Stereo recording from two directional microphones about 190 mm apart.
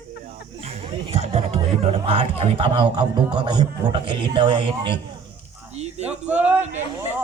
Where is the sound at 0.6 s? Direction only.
30° right (ahead or behind).